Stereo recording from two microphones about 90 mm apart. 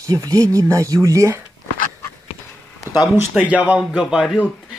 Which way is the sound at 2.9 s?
25° right (ahead or behind).